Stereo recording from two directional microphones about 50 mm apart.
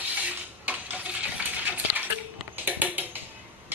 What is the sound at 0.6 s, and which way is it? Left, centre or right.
Cutlery, right.